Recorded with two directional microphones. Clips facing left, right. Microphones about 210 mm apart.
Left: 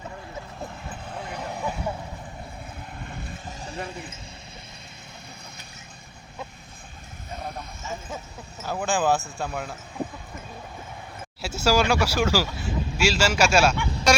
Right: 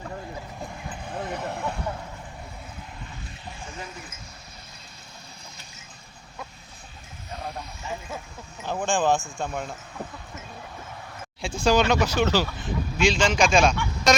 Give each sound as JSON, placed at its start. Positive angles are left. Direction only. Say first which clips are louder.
{"t": 1.0, "sound": "vehicle", "louder": "right 4 dB", "side_deg": 0}
{"t": 3.1, "sound": "vehicle", "louder": "left 4 dB", "side_deg": 55}
{"t": 3.6, "sound": "basketball bounce", "louder": "left 5 dB", "side_deg": 35}
{"t": 8.6, "sound": "a sound", "louder": "even", "side_deg": 5}
{"t": 9.4, "sound": "speech", "louder": "even", "side_deg": 5}
{"t": 11.4, "sound": "speech", "louder": "right 1 dB", "side_deg": 5}